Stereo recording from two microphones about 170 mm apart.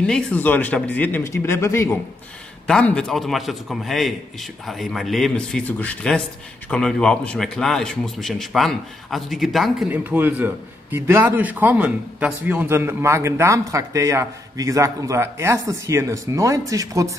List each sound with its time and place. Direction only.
0.0 s a man's voice: 5° left (ahead or behind)
9.8 s a man's voice: 10° right (ahead or behind)